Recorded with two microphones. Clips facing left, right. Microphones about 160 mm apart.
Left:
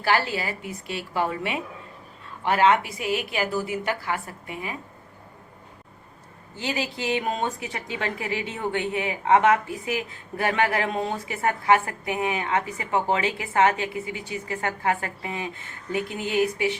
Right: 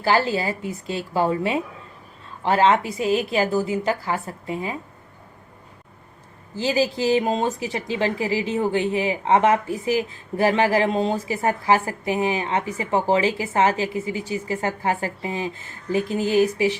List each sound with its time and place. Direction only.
0.0 s a woman's voice: 30° right (ahead or behind)
6.6 s a woman's voice: 35° right (ahead or behind)